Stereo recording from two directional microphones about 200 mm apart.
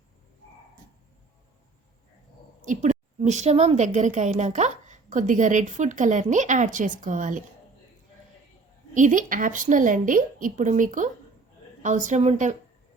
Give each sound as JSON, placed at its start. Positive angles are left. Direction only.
{"t": 2.6, "sound": "a woman's voice", "side_deg": -35}
{"t": 9.0, "sound": "a woman's voice", "side_deg": -40}